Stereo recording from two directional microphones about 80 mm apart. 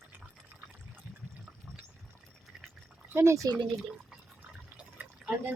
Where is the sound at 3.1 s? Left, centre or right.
Right.